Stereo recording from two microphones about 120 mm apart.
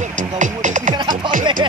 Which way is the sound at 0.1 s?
90° right.